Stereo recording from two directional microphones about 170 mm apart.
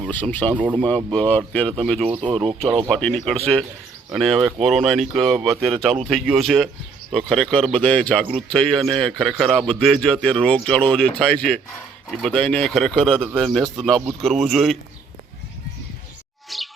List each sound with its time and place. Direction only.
0.0 s speech: 10° left (ahead or behind)
0.5 s speech: 10° right (ahead or behind)
0.8 s a man's voice: 5° left (ahead or behind)
2.0 s speech: 30° right (ahead or behind)
2.9 s a man's voice: 5° left (ahead or behind)
16.5 s chirp: centre (ahead or behind)